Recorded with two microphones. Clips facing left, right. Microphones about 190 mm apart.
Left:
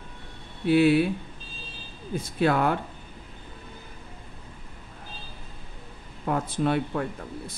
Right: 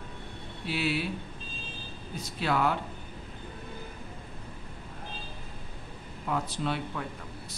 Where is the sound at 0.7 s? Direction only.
55° left (ahead or behind).